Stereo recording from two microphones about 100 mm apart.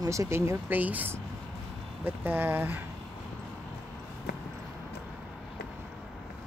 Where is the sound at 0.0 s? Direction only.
30° right (ahead or behind).